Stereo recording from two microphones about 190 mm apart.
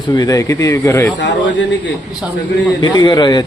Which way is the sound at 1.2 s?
70° left (ahead or behind).